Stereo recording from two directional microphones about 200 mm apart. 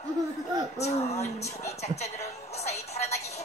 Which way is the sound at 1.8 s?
30° left (ahead or behind).